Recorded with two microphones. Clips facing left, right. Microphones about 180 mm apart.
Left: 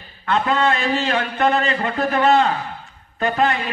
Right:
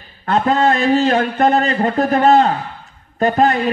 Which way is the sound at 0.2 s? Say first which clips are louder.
Right 4 dB; 40° right (ahead or behind).